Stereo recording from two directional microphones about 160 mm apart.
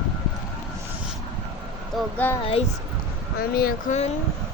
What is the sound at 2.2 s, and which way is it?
Speech, 10° left (ahead or behind).